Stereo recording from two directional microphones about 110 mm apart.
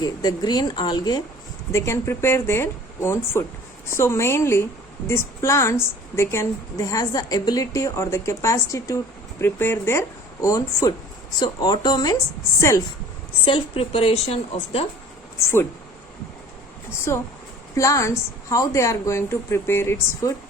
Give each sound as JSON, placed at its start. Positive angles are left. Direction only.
{"t": 0.0, "sound": "speech", "side_deg": 35}
{"t": 1.7, "sound": "a woman's voice", "side_deg": 25}
{"t": 12.5, "sound": "a woman's voice", "side_deg": 25}
{"t": 13.4, "sound": "a woman's voice", "side_deg": 60}
{"t": 17.1, "sound": "a woman's voice", "side_deg": 25}